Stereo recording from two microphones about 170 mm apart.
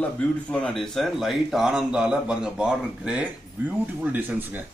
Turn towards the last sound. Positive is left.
turn(degrees=-10)  # may be behind; listen again after turning